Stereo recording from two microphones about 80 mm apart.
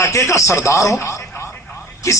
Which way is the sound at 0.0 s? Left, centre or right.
Left.